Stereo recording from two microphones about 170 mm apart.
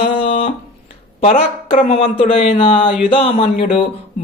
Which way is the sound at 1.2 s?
35° left (ahead or behind).